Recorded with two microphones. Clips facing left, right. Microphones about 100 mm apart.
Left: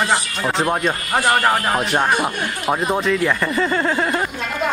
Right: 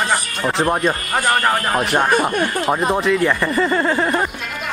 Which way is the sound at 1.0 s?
20° left (ahead or behind).